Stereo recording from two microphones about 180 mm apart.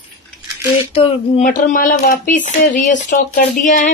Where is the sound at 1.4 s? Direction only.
45° left (ahead or behind).